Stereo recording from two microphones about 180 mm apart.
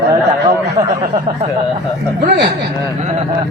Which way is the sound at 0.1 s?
20° right (ahead or behind).